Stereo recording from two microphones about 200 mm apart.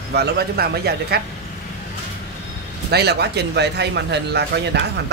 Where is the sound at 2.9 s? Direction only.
55° right (ahead or behind).